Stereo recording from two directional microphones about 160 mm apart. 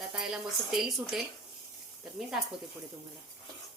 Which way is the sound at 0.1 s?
5° right (ahead or behind).